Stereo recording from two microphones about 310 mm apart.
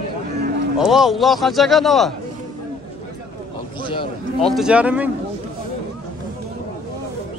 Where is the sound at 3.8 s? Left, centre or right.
Centre.